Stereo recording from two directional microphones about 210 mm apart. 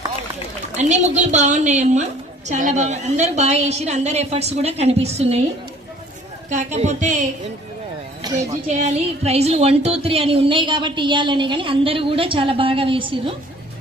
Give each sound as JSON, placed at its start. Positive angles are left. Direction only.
{"t": 0.8, "sound": "a woman's voice", "side_deg": -35}
{"t": 6.5, "sound": "a woman's voice", "side_deg": -35}
{"t": 8.2, "sound": "speech", "side_deg": -15}
{"t": 8.6, "sound": "speech", "side_deg": -35}